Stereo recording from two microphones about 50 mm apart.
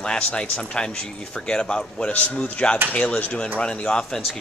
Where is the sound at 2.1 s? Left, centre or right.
Left.